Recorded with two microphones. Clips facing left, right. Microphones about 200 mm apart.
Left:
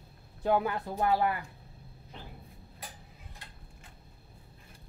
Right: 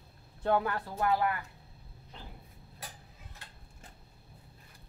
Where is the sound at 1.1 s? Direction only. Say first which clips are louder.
Left 1 dB; 30° left (ahead or behind).